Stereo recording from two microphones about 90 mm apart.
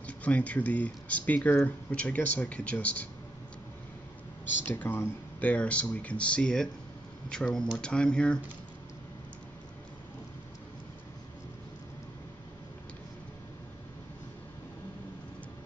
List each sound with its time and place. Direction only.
0.0 s speech: 15° left (ahead or behind)
4.6 s speech: 20° left (ahead or behind)